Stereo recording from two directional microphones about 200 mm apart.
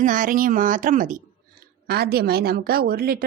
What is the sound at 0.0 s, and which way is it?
A woman's voice, 40° right (ahead or behind).